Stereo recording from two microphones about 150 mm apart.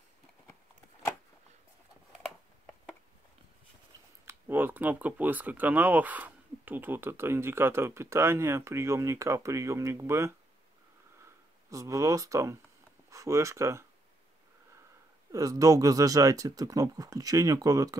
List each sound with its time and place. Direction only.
4.3 s speech: 15° right (ahead or behind)
11.7 s speech: 20° right (ahead or behind)
15.3 s speech: 25° right (ahead or behind)